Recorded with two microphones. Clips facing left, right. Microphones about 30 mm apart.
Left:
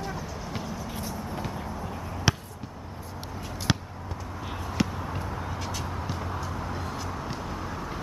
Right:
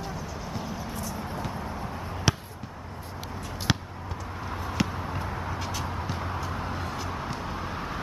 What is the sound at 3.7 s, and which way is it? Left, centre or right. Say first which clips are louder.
Basketball bounce: even; centre.